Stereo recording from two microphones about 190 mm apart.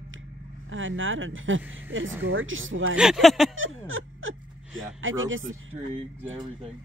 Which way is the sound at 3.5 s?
90° right.